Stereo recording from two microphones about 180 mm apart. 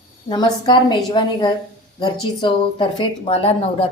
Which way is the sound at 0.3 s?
25° left (ahead or behind).